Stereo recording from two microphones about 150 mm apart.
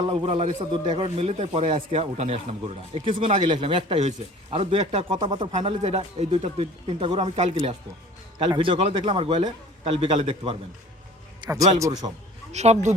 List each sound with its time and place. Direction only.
0.1 s a man's voice: 40° right (ahead or behind)
5.3 s a man's voice: 30° right (ahead or behind)
11.3 s a man's voice: 25° right (ahead or behind)
12.5 s speech: 50° right (ahead or behind)